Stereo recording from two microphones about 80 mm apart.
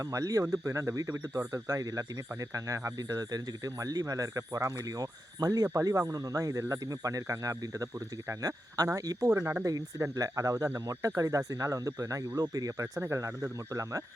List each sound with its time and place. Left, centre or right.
0.0 s speech: right